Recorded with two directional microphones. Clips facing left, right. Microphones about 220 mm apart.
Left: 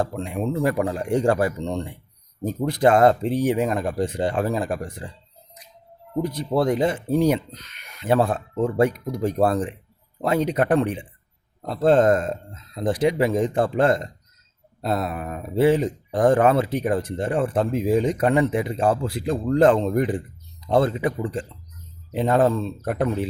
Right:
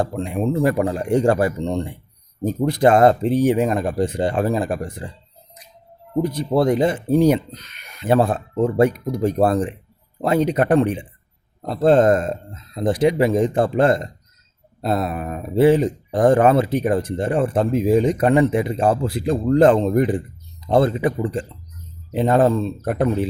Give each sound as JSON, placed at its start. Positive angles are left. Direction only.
{"t": 0.0, "sound": "speech", "side_deg": -35}
{"t": 6.1, "sound": "speech", "side_deg": -30}